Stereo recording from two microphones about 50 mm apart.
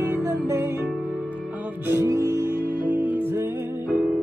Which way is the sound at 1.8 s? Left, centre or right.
Right.